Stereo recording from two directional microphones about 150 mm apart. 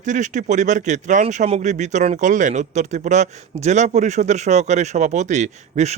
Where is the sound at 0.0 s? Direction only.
55° right (ahead or behind).